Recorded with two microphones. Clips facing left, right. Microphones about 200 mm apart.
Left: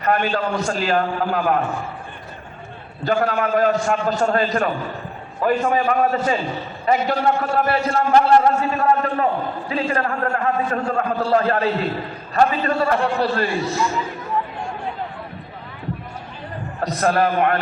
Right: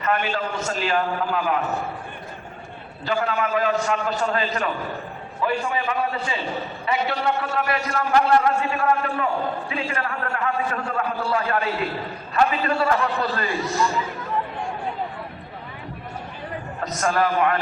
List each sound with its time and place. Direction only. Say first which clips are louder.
0.0 s a man's voice: left 4 dB; 40° left (ahead or behind)
3.1 s a man's voice: left 4 dB; 45° left (ahead or behind)
17.0 s a man's voice: left 3 dB; 55° left (ahead or behind)